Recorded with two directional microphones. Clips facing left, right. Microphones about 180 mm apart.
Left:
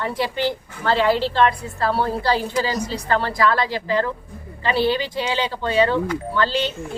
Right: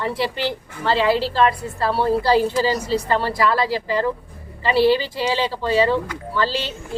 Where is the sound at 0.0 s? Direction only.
Centre (ahead or behind).